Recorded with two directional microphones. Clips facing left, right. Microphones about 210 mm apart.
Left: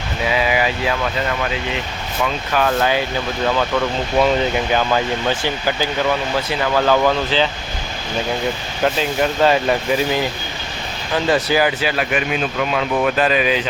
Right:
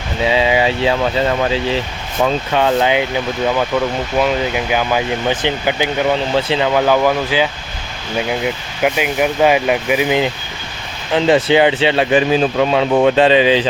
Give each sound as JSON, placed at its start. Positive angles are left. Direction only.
{"t": 0.3, "sound": "speech", "side_deg": -25}
{"t": 4.2, "sound": "speech", "side_deg": -10}
{"t": 8.8, "sound": "speech", "side_deg": -15}